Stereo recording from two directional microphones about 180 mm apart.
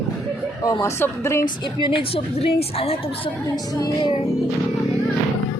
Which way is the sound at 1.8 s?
30° left (ahead or behind).